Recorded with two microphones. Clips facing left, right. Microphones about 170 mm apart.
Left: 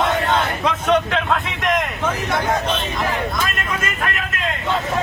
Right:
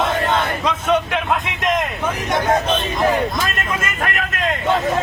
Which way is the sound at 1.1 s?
20° right (ahead or behind).